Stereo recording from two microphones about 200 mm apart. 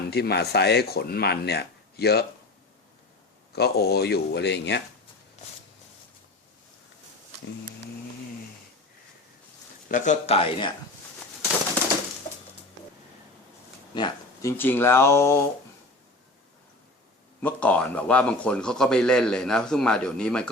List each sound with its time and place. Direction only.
0.1 s speech: 55° left (ahead or behind)
3.5 s speech: 50° left (ahead or behind)
5.4 s a sound: 35° left (ahead or behind)
9.9 s speech: 40° left (ahead or behind)
13.9 s a sound: 20° left (ahead or behind)
14.5 s speech: 10° left (ahead or behind)
17.4 s a man's voice: 5° left (ahead or behind)